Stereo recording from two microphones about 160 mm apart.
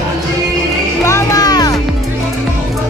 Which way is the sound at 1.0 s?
20° left (ahead or behind).